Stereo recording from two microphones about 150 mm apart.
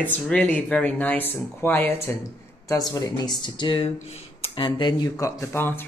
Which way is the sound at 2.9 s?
25° left (ahead or behind).